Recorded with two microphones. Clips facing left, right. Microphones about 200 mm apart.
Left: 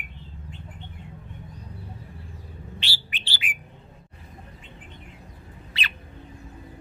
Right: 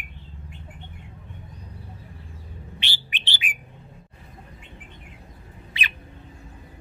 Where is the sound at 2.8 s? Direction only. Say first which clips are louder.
Right 1 dB; 20° right (ahead or behind).